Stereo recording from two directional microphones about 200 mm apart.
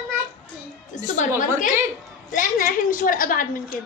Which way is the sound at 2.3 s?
45° left (ahead or behind).